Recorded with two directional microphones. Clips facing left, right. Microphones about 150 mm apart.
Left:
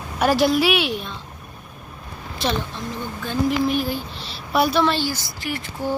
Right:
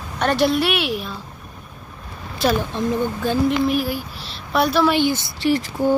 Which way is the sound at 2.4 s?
Centre (ahead or behind).